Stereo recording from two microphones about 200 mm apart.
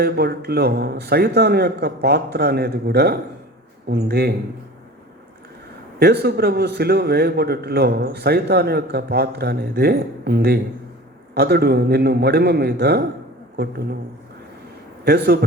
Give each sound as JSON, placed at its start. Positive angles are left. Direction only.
{"t": 0.0, "sound": "a man's voice", "side_deg": -55}
{"t": 6.0, "sound": "a man's voice", "side_deg": -55}
{"t": 15.0, "sound": "a man's voice", "side_deg": -55}